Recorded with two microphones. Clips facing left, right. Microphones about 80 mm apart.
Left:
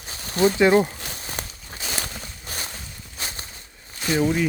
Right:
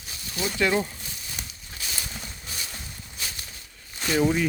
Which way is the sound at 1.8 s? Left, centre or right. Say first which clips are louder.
Left 6 dB; left.